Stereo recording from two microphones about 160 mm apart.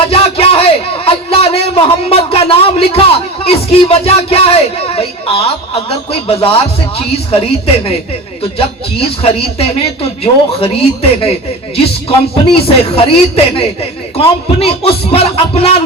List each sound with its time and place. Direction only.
0.1 s a man's voice: 35° left (ahead or behind)
12.3 s speech: 35° left (ahead or behind)